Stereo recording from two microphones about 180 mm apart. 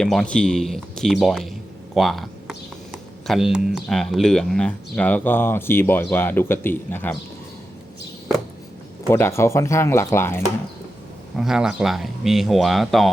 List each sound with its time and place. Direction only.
0.0 s speech: 5° left (ahead or behind)
9.0 s speech: 15° left (ahead or behind)
11.3 s speech: 5° right (ahead or behind)